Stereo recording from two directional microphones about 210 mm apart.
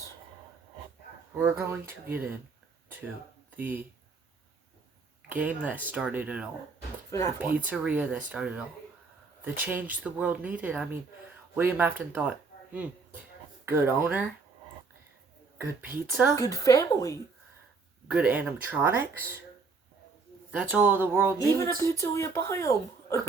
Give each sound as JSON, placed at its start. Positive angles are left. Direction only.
{"t": 1.4, "sound": "speech", "side_deg": -10}
{"t": 5.3, "sound": "speech", "side_deg": -10}
{"t": 7.1, "sound": "speech", "side_deg": 15}
{"t": 7.7, "sound": "speech", "side_deg": -5}
{"t": 16.3, "sound": "speech", "side_deg": 15}
{"t": 18.1, "sound": "speech", "side_deg": -5}
{"t": 20.5, "sound": "speech", "side_deg": -5}
{"t": 21.5, "sound": "speech", "side_deg": 15}